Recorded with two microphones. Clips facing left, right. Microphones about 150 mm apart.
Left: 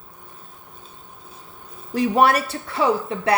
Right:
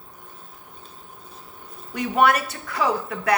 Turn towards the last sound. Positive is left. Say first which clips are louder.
# left 3 dB
turn(degrees=25)  # may be behind; listen again after turning